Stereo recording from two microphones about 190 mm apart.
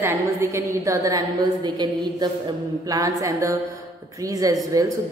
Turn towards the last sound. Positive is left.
turn(degrees=-20)  # may be behind; listen again after turning